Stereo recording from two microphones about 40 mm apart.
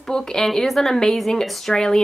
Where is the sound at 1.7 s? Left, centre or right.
Centre.